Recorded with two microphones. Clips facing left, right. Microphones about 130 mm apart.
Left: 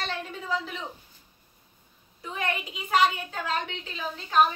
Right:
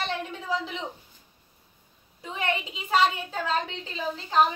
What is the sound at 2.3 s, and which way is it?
A woman's voice, 25° right (ahead or behind).